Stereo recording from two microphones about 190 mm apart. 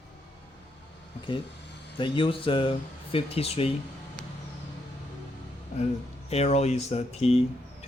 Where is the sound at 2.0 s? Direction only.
25° left (ahead or behind).